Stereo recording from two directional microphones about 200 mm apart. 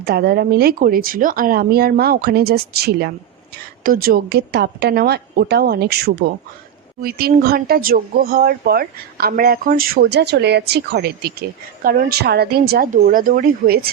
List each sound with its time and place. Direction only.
0.0 s speech: 55° right (ahead or behind)